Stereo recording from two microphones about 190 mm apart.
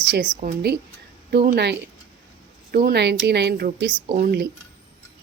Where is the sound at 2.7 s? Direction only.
55° right (ahead or behind).